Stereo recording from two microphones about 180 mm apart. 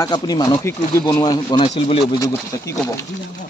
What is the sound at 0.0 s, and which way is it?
Speech, 20° left (ahead or behind).